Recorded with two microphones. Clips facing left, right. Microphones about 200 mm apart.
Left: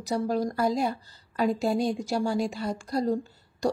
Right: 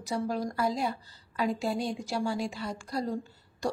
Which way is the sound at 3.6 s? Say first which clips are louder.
Left 5 dB; 40° left (ahead or behind).